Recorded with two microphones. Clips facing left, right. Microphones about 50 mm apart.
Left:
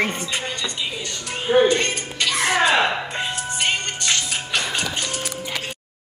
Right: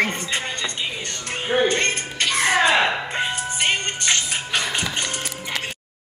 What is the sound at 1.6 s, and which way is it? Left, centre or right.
Speech, right.